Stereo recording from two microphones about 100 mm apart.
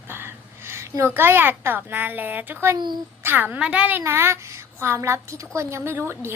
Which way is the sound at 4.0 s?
25° right (ahead or behind).